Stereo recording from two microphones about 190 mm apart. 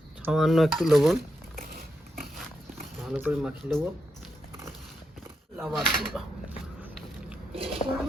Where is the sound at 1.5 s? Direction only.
50° right (ahead or behind).